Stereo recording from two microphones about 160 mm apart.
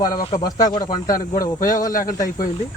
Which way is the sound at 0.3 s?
25° left (ahead or behind).